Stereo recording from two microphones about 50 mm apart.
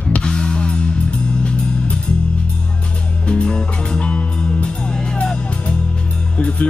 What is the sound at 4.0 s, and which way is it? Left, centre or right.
Music, centre.